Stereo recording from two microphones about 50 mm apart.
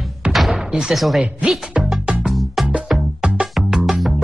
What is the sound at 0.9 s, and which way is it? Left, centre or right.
Speech, centre.